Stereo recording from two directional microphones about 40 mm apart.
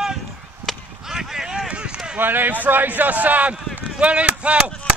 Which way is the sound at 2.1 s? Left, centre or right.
Right.